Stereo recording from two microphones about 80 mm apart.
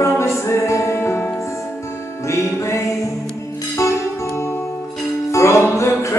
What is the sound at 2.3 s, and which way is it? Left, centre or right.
Music, left.